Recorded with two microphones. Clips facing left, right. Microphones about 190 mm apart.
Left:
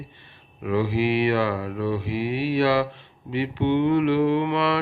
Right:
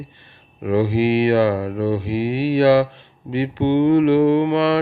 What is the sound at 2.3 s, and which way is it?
Mantra, 25° right (ahead or behind).